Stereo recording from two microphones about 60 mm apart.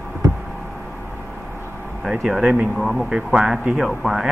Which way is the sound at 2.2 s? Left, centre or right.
Centre.